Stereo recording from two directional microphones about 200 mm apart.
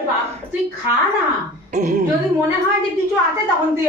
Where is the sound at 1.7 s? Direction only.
40° right (ahead or behind).